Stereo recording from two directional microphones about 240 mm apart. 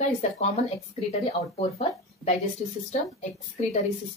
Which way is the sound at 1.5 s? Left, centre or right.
Left.